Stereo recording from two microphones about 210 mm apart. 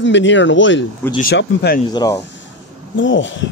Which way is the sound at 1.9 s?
20° left (ahead or behind).